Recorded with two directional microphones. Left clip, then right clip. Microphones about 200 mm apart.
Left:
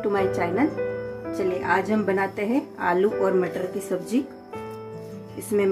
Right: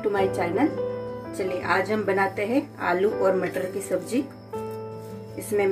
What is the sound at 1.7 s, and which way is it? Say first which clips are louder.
A woman's voice: right 2 dB; 55° left (ahead or behind).